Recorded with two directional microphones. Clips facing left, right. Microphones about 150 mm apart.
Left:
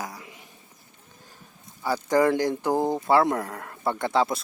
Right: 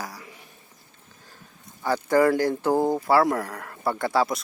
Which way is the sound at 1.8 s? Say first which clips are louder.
Right 1 dB; 15° left (ahead or behind).